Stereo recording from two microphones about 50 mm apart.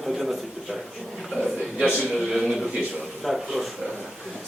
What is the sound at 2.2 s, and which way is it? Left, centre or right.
A man's voice, centre.